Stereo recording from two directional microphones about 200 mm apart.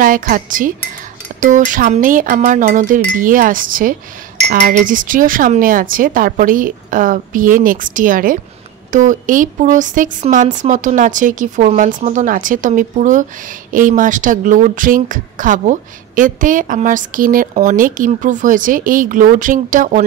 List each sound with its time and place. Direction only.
0.0 s speech: 45° right (ahead or behind)